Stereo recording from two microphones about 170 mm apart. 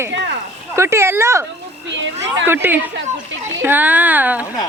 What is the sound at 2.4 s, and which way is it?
Speech, 10° right (ahead or behind).